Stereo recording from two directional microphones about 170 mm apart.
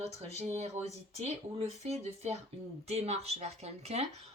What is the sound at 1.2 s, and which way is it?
A woman's voice, 40° right (ahead or behind).